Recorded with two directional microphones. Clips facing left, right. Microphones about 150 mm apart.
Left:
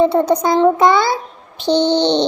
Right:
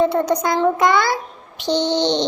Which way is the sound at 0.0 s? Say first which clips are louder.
Left 4 dB; 25° left (ahead or behind).